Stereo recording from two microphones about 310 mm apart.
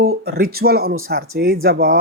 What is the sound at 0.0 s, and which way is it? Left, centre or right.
Speech, right.